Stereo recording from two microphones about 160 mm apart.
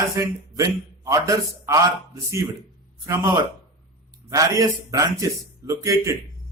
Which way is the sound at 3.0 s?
20° right (ahead or behind).